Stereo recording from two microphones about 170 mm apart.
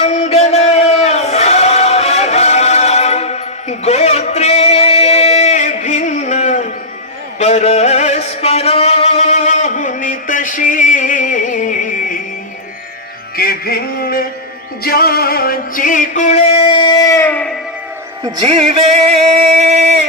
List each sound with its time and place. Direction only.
0.0 s a sound: 40° left (ahead or behind)
7.3 s music: 40° left (ahead or behind)
13.3 s music: 65° left (ahead or behind); by 17.6 s 5° left (ahead or behind)
18.2 s music: 30° right (ahead or behind)